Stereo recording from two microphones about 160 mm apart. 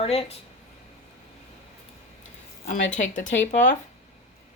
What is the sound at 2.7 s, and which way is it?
Speech, 50° left (ahead or behind).